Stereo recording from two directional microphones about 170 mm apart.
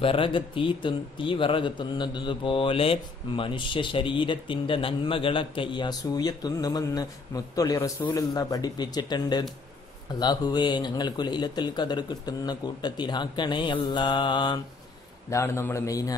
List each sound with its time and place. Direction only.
0.0 s a man's voice: 30° left (ahead or behind)
15.2 s a man's voice: 15° left (ahead or behind)